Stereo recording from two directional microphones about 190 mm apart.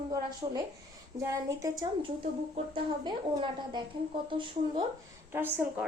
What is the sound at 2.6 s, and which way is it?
Speech, 30° right (ahead or behind).